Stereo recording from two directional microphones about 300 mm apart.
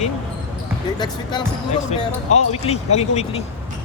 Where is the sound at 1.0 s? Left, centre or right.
Centre.